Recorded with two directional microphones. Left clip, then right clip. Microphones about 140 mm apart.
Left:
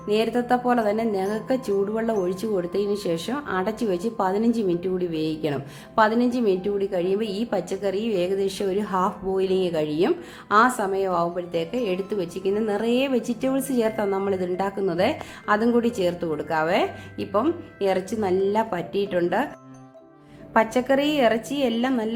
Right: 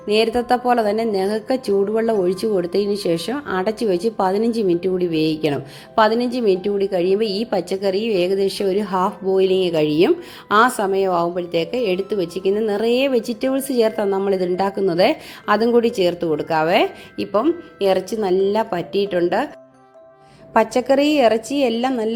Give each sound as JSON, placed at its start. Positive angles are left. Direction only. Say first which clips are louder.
{"t": 0.1, "sound": "a woman's voice", "louder": "right 5 dB", "side_deg": -35}
{"t": 20.5, "sound": "a woman's voice", "louder": "right 4 dB", "side_deg": -30}